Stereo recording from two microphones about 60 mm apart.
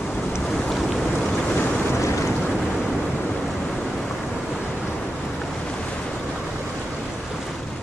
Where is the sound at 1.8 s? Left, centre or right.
Left.